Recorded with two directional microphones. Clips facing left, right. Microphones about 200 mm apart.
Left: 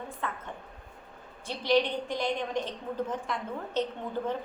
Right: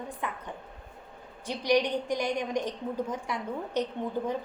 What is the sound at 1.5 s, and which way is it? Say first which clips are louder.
A woman's voice: even; 15° right (ahead or behind).